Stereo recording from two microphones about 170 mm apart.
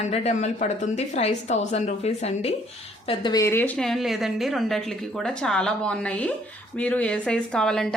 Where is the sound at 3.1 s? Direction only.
25° left (ahead or behind); by 7.8 s 5° left (ahead or behind).